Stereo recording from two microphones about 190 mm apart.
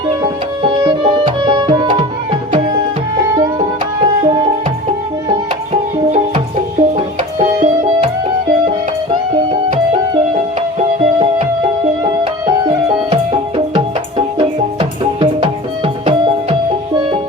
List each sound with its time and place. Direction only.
0.9 s tabla: 25° right (ahead or behind)
3.6 s music: 30° right (ahead or behind)
5.7 s music: 40° right (ahead or behind)
10.8 s music: 30° right (ahead or behind)
14.3 s music: 30° right (ahead or behind)